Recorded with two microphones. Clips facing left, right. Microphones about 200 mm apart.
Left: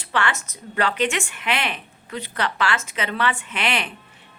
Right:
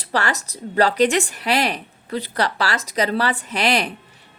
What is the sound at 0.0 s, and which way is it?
Speech, 40° right (ahead or behind).